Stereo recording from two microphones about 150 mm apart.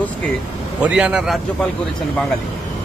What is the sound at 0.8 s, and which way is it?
Speech, 5° right (ahead or behind).